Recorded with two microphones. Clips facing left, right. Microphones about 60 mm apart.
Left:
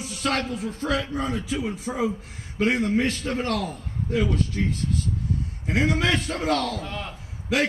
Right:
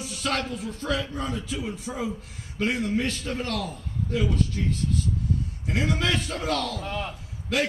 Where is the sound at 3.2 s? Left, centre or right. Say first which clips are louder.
Left 4 dB; left.